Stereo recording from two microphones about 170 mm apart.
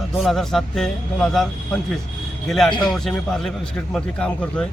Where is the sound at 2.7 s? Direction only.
25° left (ahead or behind).